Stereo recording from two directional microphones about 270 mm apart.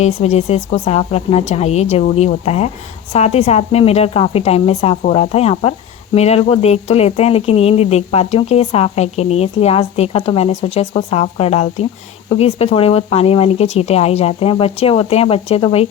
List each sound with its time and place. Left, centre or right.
0.0 s speech: left